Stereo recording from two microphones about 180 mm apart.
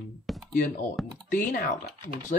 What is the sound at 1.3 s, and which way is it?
Speech, 50° left (ahead or behind).